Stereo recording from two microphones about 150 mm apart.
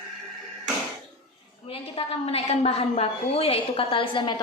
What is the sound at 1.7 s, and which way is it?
A woman's voice, 40° left (ahead or behind).